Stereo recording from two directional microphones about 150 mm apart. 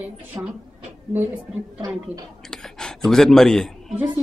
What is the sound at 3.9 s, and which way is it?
Speech, 10° right (ahead or behind).